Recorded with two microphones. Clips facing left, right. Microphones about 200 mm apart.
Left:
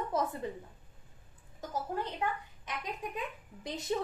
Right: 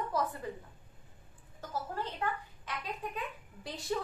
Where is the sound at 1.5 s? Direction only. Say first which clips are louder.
Left 2 dB; 15° left (ahead or behind).